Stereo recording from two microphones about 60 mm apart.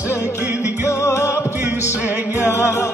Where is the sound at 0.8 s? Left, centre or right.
Left.